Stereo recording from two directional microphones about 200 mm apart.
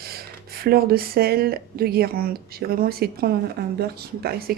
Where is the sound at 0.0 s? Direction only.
50° right (ahead or behind).